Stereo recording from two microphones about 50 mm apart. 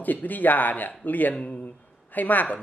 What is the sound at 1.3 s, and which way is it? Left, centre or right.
Speech, left.